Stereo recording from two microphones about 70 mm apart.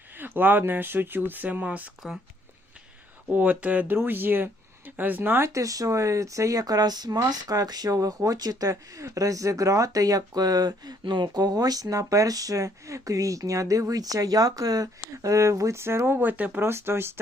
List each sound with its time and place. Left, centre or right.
0.2 s speech: right
3.3 s speech: right
5.4 s speech: right
7.9 s speech: right
8.7 s speech: right
16.6 s speech: right